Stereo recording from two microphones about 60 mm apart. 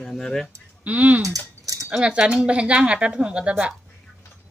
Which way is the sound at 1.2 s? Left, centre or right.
Right.